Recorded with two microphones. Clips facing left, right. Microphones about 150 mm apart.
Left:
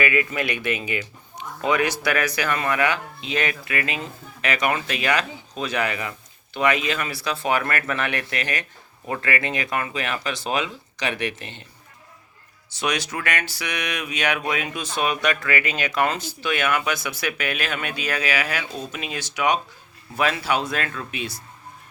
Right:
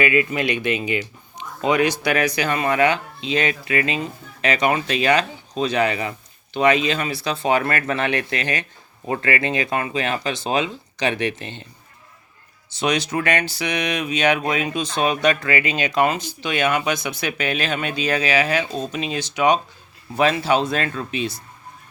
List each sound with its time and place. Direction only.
0.0 s speech: 25° right (ahead or behind)
12.8 s speech: 25° right (ahead or behind)